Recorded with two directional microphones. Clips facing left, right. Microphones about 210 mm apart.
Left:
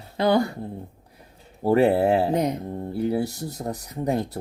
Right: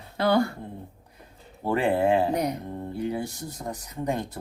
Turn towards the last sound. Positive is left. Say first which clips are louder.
# left 4 dB
turn(degrees=35)  # may be behind; listen again after turning